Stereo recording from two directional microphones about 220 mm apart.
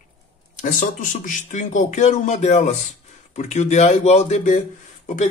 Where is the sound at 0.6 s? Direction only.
35° left (ahead or behind).